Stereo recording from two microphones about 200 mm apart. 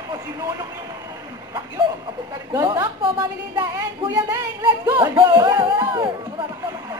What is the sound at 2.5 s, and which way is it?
A woman's voice, 15° right (ahead or behind).